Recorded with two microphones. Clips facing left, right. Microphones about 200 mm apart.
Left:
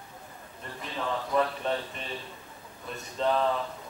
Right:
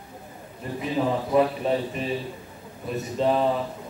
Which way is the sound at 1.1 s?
30° right (ahead or behind).